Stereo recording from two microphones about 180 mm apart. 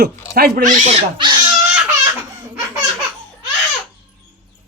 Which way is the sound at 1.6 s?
5° right (ahead or behind).